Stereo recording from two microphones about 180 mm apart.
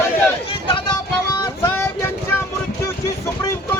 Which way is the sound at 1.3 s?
15° left (ahead or behind).